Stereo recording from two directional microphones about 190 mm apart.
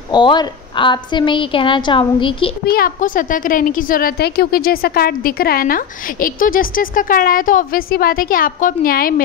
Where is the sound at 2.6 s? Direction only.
50° left (ahead or behind).